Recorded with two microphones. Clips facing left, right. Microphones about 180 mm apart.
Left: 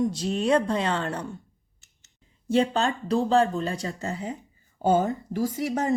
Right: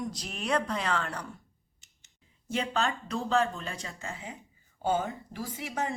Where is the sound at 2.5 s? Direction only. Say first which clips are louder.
Left 8 dB; 30° left (ahead or behind).